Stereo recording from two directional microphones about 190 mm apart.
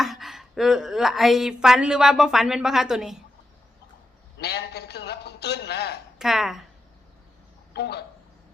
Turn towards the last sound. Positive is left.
turn(degrees=60)  # may be behind; listen again after turning